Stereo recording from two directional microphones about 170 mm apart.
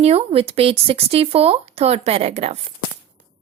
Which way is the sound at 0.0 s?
35° right (ahead or behind).